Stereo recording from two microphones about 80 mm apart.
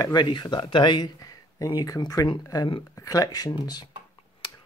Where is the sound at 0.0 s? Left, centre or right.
Left.